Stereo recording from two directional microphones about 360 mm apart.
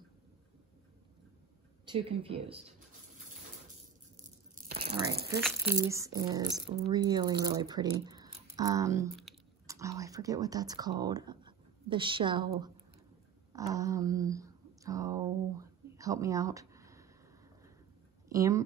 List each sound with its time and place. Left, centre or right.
1.9 s speech: centre
4.2 s tearing: right
5.3 s speech: centre
13.5 s a sound: centre
18.3 s speech: centre